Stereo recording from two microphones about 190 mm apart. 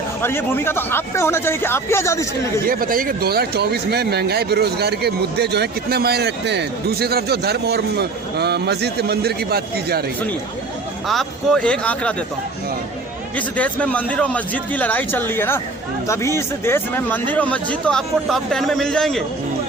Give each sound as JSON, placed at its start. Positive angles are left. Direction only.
{"t": 0.2, "sound": "speech", "side_deg": 10}
{"t": 2.6, "sound": "speech", "side_deg": -50}
{"t": 11.1, "sound": "speech", "side_deg": 0}
{"t": 13.3, "sound": "speech", "side_deg": 5}